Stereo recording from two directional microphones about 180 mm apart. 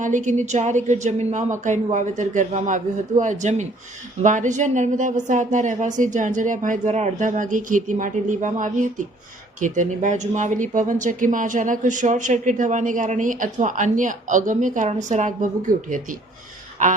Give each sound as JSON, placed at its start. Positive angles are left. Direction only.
{"t": 0.0, "sound": "speech", "side_deg": -45}